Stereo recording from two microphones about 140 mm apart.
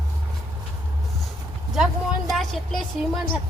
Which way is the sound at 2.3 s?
Centre (ahead or behind).